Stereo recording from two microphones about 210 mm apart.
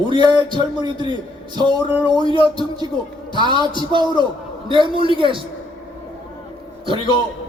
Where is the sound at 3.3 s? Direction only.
20° right (ahead or behind).